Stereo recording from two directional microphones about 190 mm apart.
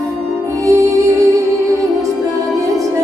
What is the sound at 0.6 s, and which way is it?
Music, 15° right (ahead or behind).